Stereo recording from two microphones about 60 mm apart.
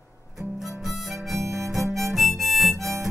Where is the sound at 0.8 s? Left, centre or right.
Centre.